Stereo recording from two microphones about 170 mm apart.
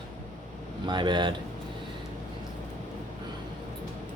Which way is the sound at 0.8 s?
25° right (ahead or behind).